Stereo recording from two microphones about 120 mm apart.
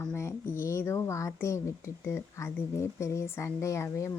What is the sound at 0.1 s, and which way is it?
Speech, 25° left (ahead or behind).